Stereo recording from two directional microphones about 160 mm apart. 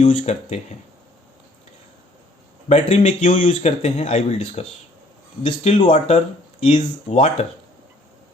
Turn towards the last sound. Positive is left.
turn(degrees=40)  # may be behind; listen again after turning